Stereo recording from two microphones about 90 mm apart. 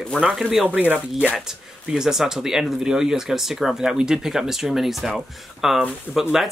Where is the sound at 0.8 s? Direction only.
15° right (ahead or behind).